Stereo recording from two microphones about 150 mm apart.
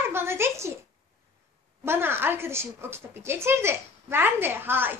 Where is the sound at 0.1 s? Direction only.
15° right (ahead or behind).